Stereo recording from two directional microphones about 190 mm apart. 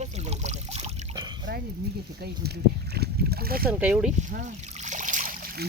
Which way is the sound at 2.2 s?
55° right (ahead or behind).